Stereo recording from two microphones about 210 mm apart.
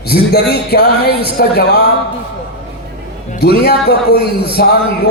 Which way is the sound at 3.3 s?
50° left (ahead or behind).